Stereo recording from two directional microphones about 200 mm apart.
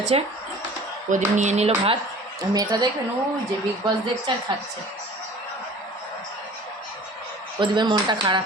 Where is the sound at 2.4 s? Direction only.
20° right (ahead or behind).